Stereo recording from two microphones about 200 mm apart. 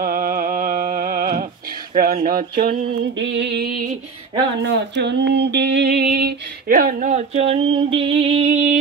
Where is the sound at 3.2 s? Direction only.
60° right (ahead or behind).